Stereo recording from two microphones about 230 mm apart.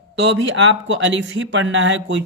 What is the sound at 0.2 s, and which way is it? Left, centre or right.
Speech, right.